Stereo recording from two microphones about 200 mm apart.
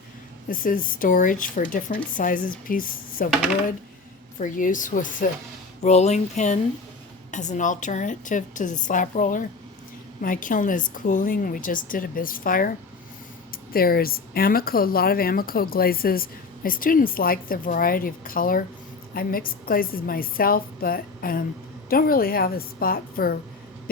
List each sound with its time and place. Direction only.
0.4 s speech: 45° left (ahead or behind)
3.2 s speech: centre (ahead or behind)
4.4 s a woman's voice: 40° left (ahead or behind)
13.7 s speech: 50° left (ahead or behind)